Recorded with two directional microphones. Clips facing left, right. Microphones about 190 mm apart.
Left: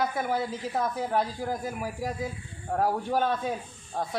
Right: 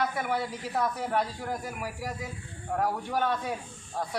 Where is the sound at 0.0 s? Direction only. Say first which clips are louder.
Left 2 dB; 25° left (ahead or behind).